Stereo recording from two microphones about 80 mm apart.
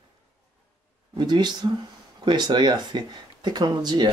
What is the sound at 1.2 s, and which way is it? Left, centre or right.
Speech, right.